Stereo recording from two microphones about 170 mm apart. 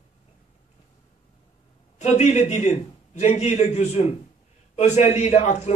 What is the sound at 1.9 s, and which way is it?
A man's voice, 40° left (ahead or behind).